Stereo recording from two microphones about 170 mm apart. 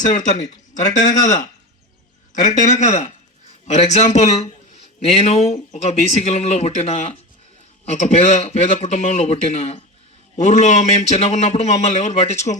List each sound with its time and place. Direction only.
0.0 s a man's voice: 45° left (ahead or behind)
2.6 s a man's voice: 45° left (ahead or behind)